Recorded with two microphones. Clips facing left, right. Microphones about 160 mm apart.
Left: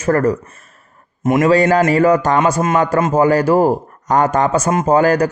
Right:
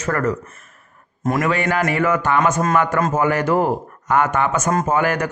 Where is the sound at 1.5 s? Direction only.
40° left (ahead or behind).